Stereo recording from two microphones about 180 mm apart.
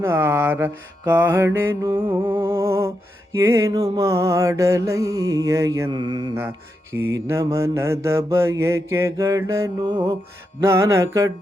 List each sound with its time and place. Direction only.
0.0 s mantra: 15° right (ahead or behind)
1.8 s music: 20° right (ahead or behind)
2.4 s mantra: 15° right (ahead or behind)
3.8 s mantra: 30° right (ahead or behind)
4.0 s mantra: 15° right (ahead or behind)